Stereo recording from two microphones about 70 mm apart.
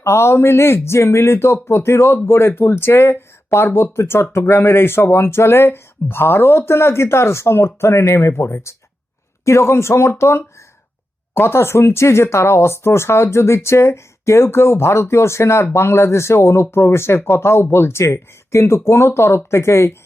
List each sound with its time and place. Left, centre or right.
0.0 s speech: left